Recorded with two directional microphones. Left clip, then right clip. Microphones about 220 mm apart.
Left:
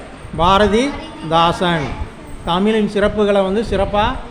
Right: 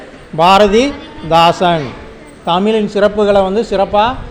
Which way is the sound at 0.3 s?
15° right (ahead or behind).